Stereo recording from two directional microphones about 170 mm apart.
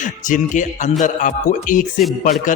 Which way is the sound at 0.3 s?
50° left (ahead or behind).